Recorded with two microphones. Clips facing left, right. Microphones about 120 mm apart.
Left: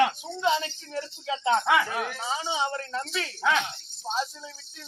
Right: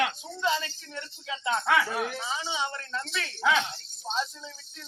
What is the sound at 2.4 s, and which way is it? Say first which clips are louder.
Speech: left 4 dB; 25° left (ahead or behind).